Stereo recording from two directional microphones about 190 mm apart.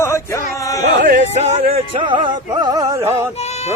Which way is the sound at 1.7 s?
30° right (ahead or behind).